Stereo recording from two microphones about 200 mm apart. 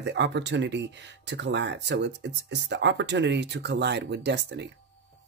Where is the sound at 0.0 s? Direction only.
60° right (ahead or behind).